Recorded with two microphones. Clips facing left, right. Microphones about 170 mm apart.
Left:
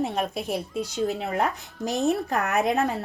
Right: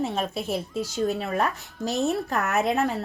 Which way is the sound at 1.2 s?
20° left (ahead or behind).